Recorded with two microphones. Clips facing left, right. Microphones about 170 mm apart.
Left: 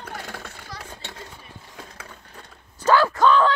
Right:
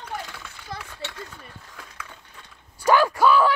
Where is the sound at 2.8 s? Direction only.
15° right (ahead or behind).